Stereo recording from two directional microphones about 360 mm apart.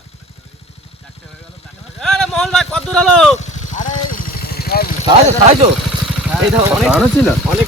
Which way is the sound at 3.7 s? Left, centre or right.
Left.